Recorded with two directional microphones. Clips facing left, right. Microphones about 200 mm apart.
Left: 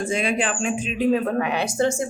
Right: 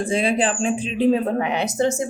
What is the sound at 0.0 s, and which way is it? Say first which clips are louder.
Speech: right 3 dB; 30° right (ahead or behind).